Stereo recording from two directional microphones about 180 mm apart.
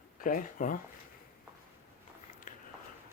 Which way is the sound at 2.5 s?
45° left (ahead or behind).